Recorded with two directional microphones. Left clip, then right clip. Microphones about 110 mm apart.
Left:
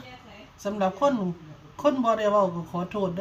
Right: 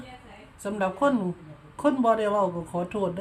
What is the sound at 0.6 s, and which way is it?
A woman's voice, 25° right (ahead or behind).